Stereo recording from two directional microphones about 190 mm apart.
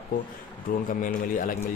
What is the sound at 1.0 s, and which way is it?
Speech, 45° left (ahead or behind).